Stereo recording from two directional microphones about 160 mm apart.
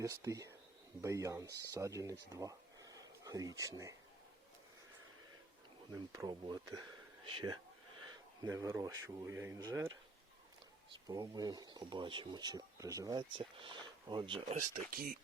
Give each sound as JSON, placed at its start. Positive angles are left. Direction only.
{"t": 0.0, "sound": "speech", "side_deg": -20}
{"t": 5.9, "sound": "speech", "side_deg": -25}
{"t": 11.1, "sound": "speech", "side_deg": -25}
{"t": 14.5, "sound": "speech", "side_deg": -50}